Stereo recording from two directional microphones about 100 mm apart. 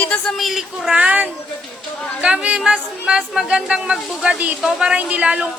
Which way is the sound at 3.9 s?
5° left (ahead or behind).